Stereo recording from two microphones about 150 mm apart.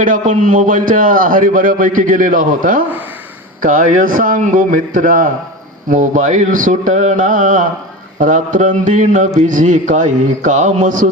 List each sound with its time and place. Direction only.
0.0 s a man's voice: 60° right (ahead or behind)